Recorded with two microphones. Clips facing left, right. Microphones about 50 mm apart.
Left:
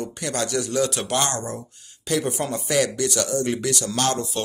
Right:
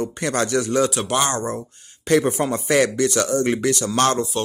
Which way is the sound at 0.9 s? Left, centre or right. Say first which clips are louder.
Right 3 dB; centre.